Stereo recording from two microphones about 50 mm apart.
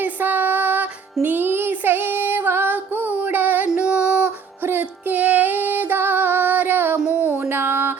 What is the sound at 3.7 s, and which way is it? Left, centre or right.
Music, right.